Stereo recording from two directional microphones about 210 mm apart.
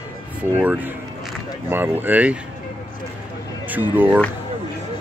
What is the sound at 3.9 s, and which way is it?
Speech, 10° right (ahead or behind).